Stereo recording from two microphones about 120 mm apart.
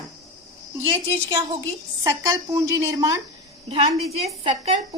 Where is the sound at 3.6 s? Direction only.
55° right (ahead or behind).